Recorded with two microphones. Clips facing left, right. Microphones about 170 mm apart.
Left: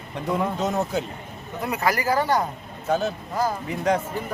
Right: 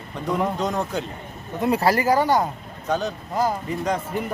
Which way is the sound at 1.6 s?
30° right (ahead or behind).